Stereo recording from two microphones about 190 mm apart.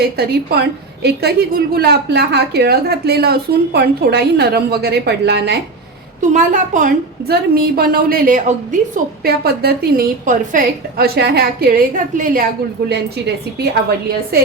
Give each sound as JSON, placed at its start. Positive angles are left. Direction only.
{"t": 0.0, "sound": "a woman's voice", "side_deg": -55}
{"t": 6.3, "sound": "a woman's voice", "side_deg": -40}
{"t": 9.2, "sound": "a woman's voice", "side_deg": -55}
{"t": 12.9, "sound": "a woman's voice", "side_deg": -60}